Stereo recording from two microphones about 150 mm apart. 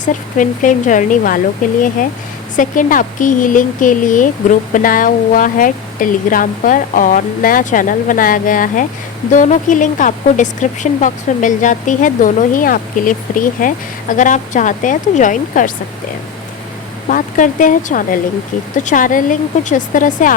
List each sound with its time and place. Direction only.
0.0 s speech: 60° left (ahead or behind)
2.6 s speech: 60° left (ahead or behind)
17.1 s speech: 60° left (ahead or behind)